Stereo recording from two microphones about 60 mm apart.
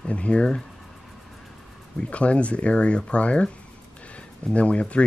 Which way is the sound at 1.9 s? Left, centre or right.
Left.